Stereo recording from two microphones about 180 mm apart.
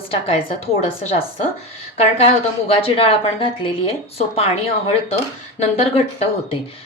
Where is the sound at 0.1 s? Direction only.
35° left (ahead or behind).